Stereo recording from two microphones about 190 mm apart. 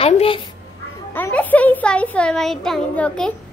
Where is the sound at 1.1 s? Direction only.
10° left (ahead or behind).